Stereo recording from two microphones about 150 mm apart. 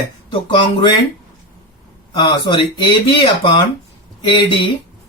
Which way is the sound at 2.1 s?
35° left (ahead or behind).